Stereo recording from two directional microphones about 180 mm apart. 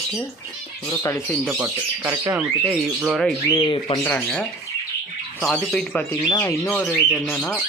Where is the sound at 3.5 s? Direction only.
25° left (ahead or behind).